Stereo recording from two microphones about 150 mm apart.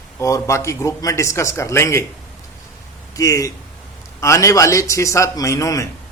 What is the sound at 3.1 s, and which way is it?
A man's voice, 20° left (ahead or behind).